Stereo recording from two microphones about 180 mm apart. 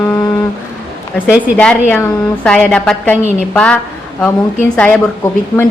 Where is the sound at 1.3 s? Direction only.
5° right (ahead or behind).